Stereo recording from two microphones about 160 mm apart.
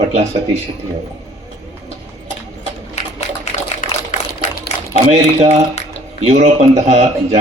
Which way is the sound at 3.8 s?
60° left (ahead or behind).